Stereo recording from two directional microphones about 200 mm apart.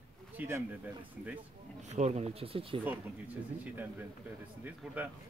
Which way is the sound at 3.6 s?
10° right (ahead or behind).